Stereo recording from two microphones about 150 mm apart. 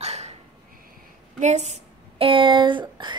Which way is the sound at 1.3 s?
50° right (ahead or behind).